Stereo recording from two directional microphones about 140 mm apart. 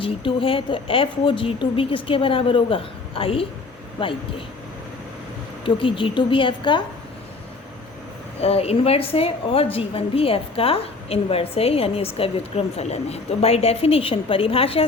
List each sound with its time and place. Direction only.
0.0 s speech: 40° left (ahead or behind)
5.6 s speech: 35° left (ahead or behind)
8.4 s a woman's voice: 45° left (ahead or behind)